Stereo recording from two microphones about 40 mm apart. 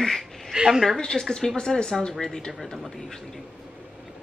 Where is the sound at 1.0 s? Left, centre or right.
Centre.